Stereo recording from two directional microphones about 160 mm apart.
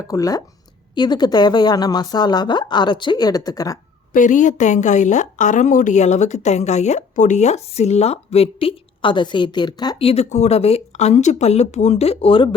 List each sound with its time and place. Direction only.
0.1 s a woman's voice: 20° left (ahead or behind)
4.1 s a woman's voice: 50° left (ahead or behind); by 12.5 s 35° left (ahead or behind)